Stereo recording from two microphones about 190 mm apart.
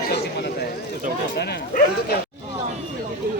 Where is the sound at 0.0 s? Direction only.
60° left (ahead or behind).